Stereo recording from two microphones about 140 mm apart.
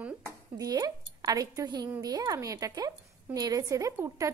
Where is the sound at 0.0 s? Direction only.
20° right (ahead or behind).